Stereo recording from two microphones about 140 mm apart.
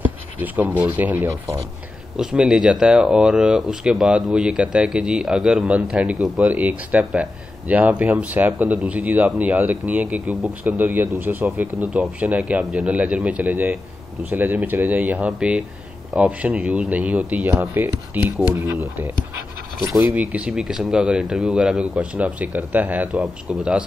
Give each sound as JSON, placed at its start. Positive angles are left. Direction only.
{"t": 0.0, "sound": "speech", "side_deg": -10}
{"t": 11.1, "sound": "speech", "side_deg": -15}
{"t": 17.5, "sound": "speech", "side_deg": -20}
{"t": 20.1, "sound": "speech", "side_deg": -5}